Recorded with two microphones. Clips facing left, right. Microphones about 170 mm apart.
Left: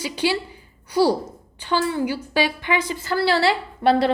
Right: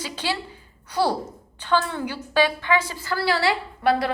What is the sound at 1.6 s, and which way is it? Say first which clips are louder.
A woman's voice: left 2 dB; 10° left (ahead or behind).